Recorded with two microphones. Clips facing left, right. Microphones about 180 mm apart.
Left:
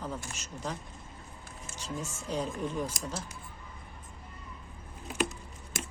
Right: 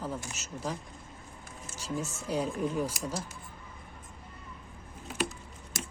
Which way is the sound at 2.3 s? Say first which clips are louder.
Right 2 dB; 10° right (ahead or behind).